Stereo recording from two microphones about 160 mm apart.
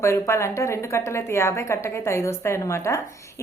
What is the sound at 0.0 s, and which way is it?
A woman's voice, 15° left (ahead or behind).